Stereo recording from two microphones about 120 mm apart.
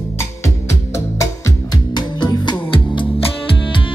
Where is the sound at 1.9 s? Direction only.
40° left (ahead or behind).